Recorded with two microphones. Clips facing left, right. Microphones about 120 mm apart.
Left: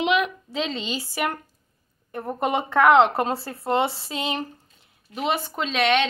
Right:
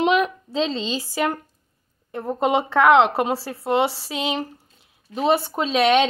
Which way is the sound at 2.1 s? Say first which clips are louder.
Right 4 dB; 20° right (ahead or behind).